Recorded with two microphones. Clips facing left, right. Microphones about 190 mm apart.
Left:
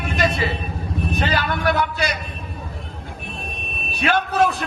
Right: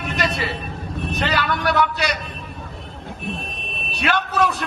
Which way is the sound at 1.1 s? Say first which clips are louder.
Right 1 dB; 50° left (ahead or behind).